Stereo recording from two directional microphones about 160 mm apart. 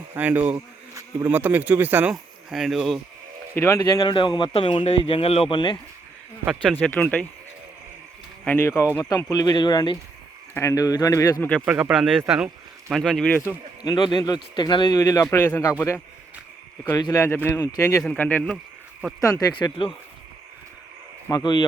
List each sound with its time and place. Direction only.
0.1 s speech: 10° right (ahead or behind)
3.5 s speech: 15° left (ahead or behind); by 5.7 s 30° left (ahead or behind)
6.4 s speech: 5° right (ahead or behind)
6.8 s speech: 10° left (ahead or behind)
8.4 s speech: 15° left (ahead or behind)
11.6 s speech: 5° right (ahead or behind)
13.8 s speech: 30° left (ahead or behind)
17.0 s speech: 20° left (ahead or behind)
18.0 s speech: 5° left (ahead or behind)
19.2 s speech: 20° left (ahead or behind)
21.2 s speech: 25° left (ahead or behind)